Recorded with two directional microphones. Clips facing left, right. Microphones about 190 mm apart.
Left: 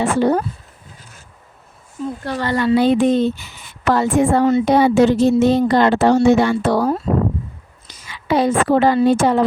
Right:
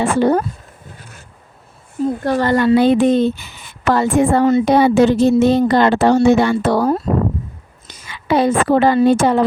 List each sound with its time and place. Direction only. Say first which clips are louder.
0.0 s speech: right 2 dB; 55° right (ahead or behind)
2.0 s speech: right 7 dB; 45° right (ahead or behind)
4.6 s a woman's voice: right 1 dB; 65° right (ahead or behind)